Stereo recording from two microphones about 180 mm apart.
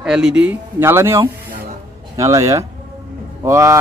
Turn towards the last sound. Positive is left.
turn(degrees=-15)  # may be behind; listen again after turning